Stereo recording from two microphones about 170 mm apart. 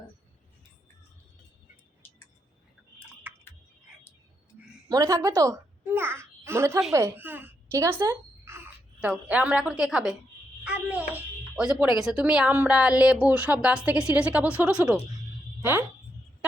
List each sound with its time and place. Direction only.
4.9 s a woman's voice: 20° right (ahead or behind); by 15.0 s 5° right (ahead or behind)